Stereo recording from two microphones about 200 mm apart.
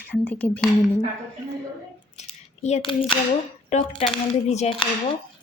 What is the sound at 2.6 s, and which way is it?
A woman's voice, 30° left (ahead or behind).